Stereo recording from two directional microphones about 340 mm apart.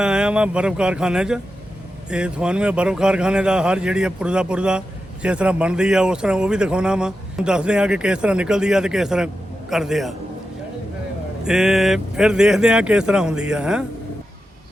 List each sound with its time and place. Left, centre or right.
0.0 s speech: centre
11.4 s speech: centre